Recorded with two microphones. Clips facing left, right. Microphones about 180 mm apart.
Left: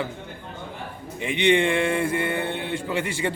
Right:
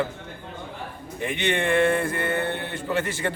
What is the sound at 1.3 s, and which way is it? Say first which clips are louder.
A man's voice: left 4 dB; 15° left (ahead or behind).